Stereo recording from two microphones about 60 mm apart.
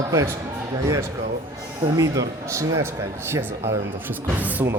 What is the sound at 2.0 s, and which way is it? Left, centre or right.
Speech, right.